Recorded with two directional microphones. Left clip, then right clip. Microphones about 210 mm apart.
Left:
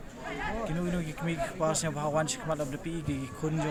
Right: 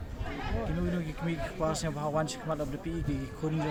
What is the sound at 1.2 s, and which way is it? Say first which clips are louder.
Speech: left 3 dB; 5° left (ahead or behind).